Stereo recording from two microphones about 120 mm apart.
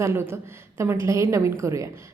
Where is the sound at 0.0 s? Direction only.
20° right (ahead or behind).